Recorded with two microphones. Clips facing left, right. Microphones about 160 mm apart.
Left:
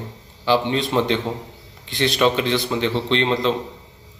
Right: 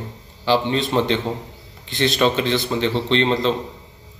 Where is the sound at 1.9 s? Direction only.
15° left (ahead or behind).